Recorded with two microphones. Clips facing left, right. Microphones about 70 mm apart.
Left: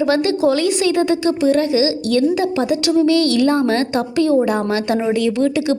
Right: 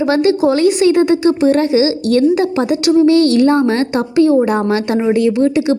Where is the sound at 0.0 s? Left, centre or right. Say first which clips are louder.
Right 3 dB; right.